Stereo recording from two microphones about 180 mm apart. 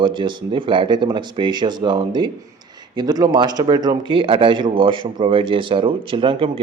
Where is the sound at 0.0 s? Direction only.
25° right (ahead or behind).